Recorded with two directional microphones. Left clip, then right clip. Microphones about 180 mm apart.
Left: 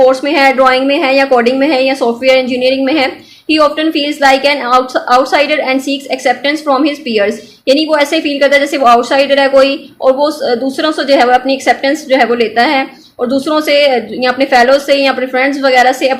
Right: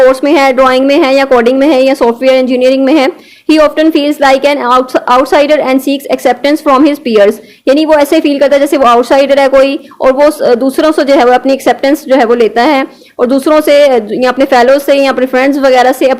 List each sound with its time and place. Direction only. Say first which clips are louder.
0.1 s a woman's voice: right 2 dB; 40° right (ahead or behind)